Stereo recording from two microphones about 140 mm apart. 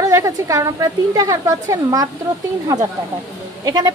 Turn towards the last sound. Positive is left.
turn(degrees=-30)  # may be behind; listen again after turning